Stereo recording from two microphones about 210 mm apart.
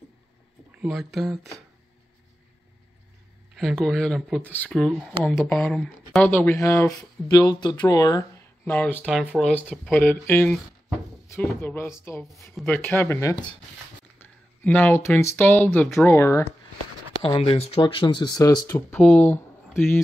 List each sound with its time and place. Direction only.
0.7 s speech: 5° right (ahead or behind)
3.5 s speech: centre (ahead or behind)
9.5 s speech: 5° left (ahead or behind)
14.1 s a sound: 10° left (ahead or behind)
15.2 s speech: 10° left (ahead or behind)
17.2 s speech: 25° left (ahead or behind)
18.9 s speech: 5° left (ahead or behind)